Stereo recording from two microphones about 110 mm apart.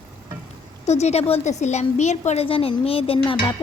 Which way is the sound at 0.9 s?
85° left.